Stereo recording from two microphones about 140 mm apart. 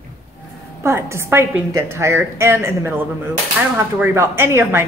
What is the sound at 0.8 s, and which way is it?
Speech, 20° right (ahead or behind).